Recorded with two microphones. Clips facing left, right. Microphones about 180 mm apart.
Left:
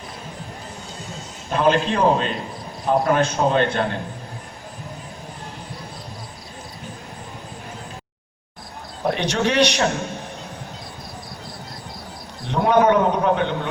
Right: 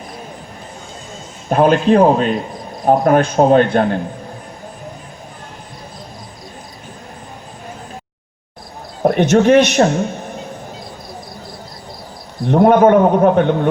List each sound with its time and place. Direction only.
1.5 s a man's voice: 50° right (ahead or behind)
9.0 s a man's voice: 50° right (ahead or behind)
12.5 s a man's voice: 50° right (ahead or behind)